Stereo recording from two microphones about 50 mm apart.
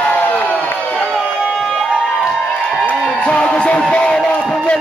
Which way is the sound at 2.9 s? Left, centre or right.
Left.